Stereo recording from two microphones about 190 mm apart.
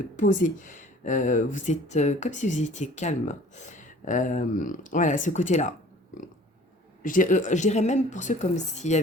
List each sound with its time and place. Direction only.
0.2 s speech: 40° left (ahead or behind)
7.0 s speech: 45° left (ahead or behind)